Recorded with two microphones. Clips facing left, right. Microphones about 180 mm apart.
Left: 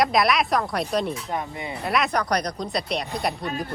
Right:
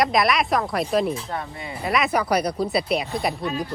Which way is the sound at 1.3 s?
15° left (ahead or behind).